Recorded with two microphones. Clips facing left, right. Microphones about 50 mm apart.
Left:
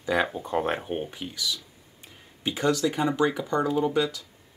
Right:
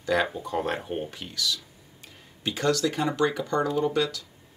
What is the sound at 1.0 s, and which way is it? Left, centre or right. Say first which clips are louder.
Speech: right 1 dB; centre.